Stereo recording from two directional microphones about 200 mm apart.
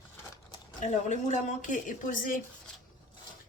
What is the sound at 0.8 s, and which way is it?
Speech, 35° left (ahead or behind).